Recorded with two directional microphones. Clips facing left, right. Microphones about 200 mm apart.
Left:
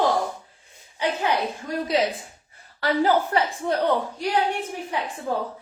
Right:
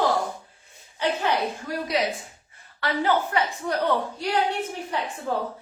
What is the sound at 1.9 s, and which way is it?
A woman's voice, 25° left (ahead or behind).